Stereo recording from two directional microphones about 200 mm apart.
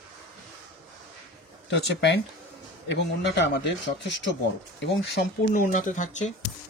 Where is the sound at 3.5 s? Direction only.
60° left (ahead or behind).